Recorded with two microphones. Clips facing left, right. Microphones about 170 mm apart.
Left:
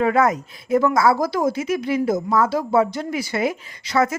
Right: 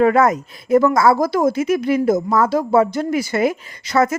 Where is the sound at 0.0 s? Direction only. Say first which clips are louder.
Right 4 dB; 50° right (ahead or behind).